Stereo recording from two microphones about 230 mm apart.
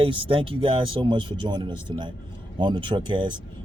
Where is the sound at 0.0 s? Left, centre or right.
Right.